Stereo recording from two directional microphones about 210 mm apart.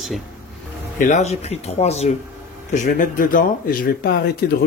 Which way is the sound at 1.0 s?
35° left (ahead or behind).